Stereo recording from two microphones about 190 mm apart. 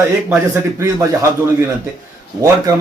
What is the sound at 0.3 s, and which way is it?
A man's voice, 15° right (ahead or behind).